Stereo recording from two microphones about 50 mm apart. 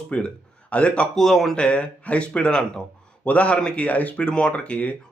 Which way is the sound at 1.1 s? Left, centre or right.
Centre.